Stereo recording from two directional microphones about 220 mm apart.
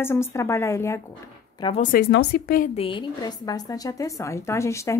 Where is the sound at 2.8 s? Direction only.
20° left (ahead or behind).